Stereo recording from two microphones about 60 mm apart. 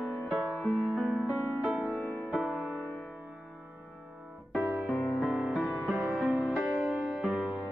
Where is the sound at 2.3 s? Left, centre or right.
Centre.